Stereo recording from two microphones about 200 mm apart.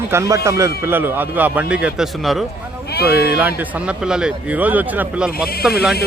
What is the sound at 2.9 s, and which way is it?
Speech, 50° left (ahead or behind).